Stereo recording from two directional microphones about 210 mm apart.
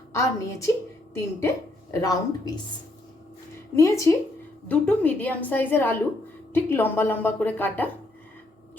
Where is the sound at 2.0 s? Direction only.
20° left (ahead or behind).